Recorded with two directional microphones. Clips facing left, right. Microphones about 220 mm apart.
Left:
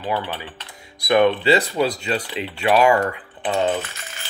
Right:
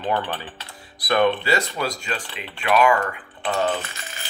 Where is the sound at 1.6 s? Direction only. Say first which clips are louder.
Left 6 dB; 35° left (ahead or behind); by 3.7 s 20° left (ahead or behind).